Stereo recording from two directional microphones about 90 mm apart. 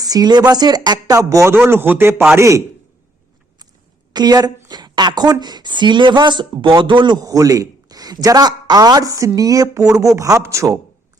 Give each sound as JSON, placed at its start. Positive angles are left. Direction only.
{"t": 0.0, "sound": "speech", "side_deg": -45}
{"t": 4.1, "sound": "speech", "side_deg": -50}